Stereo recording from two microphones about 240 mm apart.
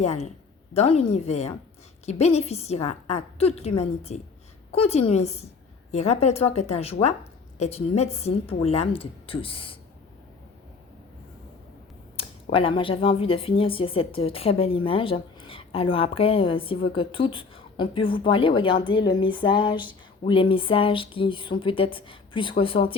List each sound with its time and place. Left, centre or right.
0.0 s speech: left
12.1 s speech: left